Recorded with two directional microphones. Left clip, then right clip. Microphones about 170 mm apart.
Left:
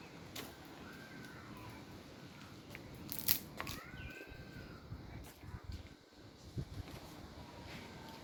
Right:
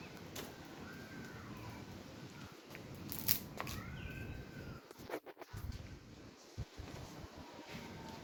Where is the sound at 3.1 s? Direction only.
45° left (ahead or behind).